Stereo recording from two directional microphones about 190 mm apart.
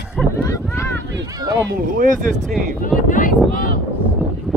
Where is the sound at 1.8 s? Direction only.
45° right (ahead or behind).